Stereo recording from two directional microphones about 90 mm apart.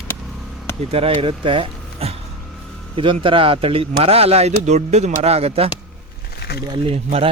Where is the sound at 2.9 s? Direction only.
70° right (ahead or behind); by 4.3 s 90° right.